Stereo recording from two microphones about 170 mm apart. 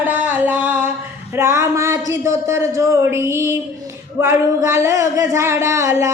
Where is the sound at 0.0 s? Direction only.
10° right (ahead or behind).